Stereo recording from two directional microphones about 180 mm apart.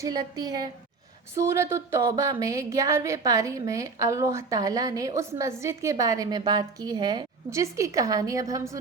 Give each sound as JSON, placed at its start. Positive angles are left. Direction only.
{"t": 0.0, "sound": "speech", "side_deg": -20}